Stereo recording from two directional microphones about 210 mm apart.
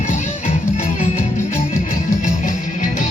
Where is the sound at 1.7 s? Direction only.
35° left (ahead or behind).